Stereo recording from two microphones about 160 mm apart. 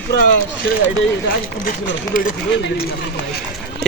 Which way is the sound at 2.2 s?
70° left (ahead or behind).